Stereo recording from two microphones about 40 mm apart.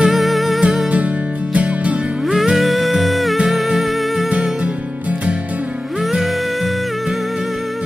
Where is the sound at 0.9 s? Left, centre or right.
Right.